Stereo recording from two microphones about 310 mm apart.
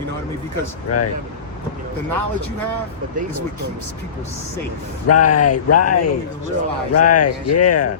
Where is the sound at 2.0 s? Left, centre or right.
Right.